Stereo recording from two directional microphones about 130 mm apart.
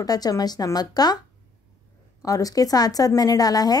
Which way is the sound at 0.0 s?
30° left (ahead or behind).